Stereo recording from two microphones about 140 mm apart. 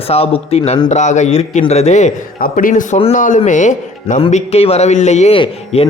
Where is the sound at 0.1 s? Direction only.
45° left (ahead or behind).